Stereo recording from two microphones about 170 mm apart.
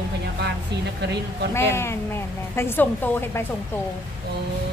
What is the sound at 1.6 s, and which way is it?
Speech, 15° left (ahead or behind).